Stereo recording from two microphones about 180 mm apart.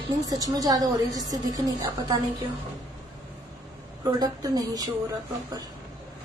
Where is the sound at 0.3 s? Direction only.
20° right (ahead or behind).